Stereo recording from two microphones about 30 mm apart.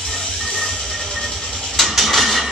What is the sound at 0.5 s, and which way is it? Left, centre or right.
Music, centre.